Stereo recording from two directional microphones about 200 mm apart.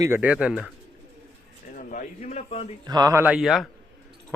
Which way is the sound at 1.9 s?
40° left (ahead or behind).